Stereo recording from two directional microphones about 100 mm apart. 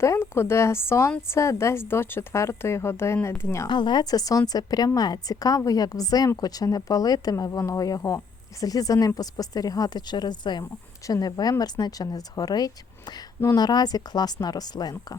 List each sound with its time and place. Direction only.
0.0 s speech: 25° left (ahead or behind)
3.7 s a woman's voice: 50° left (ahead or behind)